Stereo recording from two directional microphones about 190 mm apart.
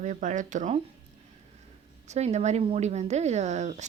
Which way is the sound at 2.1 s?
35° right (ahead or behind).